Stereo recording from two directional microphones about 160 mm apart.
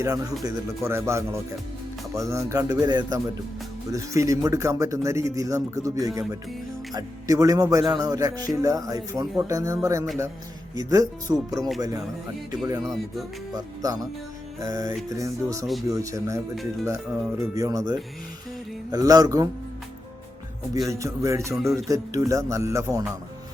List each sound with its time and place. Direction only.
0.0 s speech: 20° right (ahead or behind)
12.8 s music: centre (ahead or behind)
13.6 s speech: 25° right (ahead or behind)
20.7 s speech: 20° right (ahead or behind)